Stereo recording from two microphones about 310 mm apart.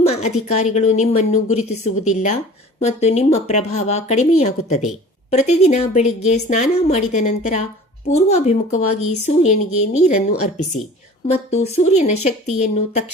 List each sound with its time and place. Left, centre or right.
0.1 s speech: left